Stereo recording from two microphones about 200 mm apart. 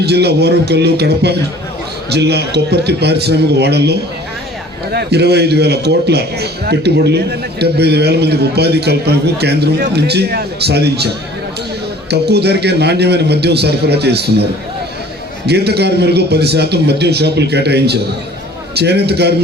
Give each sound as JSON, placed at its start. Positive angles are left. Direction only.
{"t": 0.0, "sound": "a man's voice", "side_deg": -55}
{"t": 12.1, "sound": "a man's voice", "side_deg": -55}
{"t": 15.4, "sound": "a man's voice", "side_deg": -55}